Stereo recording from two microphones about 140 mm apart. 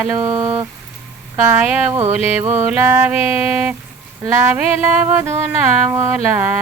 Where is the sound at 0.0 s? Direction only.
25° right (ahead or behind).